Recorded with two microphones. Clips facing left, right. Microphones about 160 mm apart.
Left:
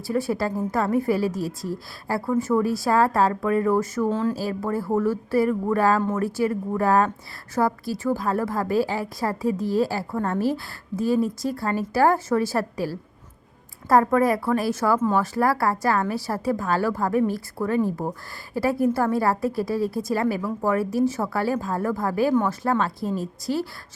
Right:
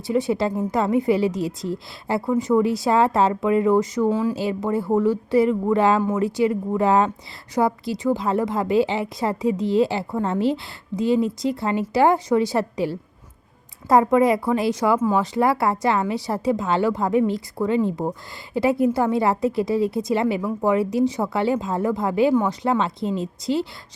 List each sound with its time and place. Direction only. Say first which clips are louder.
0.1 s a woman's voice: right 3 dB; 20° right (ahead or behind)
4.4 s a woman's voice: right 3 dB; 20° right (ahead or behind)
6.0 s speech: right 2 dB; 10° right (ahead or behind)
6.2 s a woman's voice: right 3 dB; 20° right (ahead or behind)